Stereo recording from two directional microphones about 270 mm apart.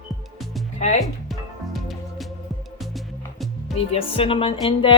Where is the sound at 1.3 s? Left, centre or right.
Centre.